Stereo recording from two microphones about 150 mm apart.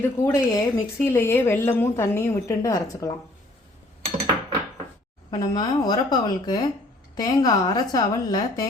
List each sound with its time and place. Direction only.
0.2 s speech: 20° left (ahead or behind)
5.3 s a woman's voice: 25° left (ahead or behind)